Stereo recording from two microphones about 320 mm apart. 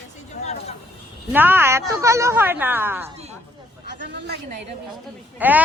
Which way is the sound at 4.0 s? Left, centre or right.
Right.